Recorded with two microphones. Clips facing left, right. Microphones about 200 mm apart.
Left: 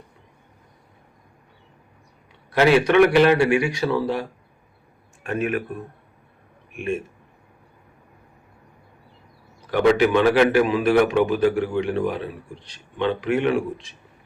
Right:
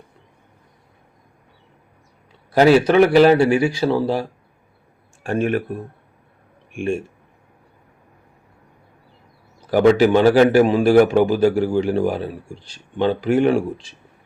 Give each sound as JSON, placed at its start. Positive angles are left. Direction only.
{"t": 2.5, "sound": "speech", "side_deg": -40}
{"t": 9.6, "sound": "speech", "side_deg": -35}